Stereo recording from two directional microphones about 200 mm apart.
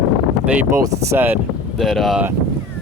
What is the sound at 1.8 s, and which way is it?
Speech, centre (ahead or behind).